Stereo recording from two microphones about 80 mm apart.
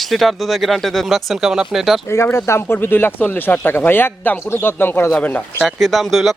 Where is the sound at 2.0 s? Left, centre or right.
Left.